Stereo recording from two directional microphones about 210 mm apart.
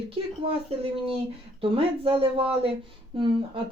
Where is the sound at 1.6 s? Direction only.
25° right (ahead or behind).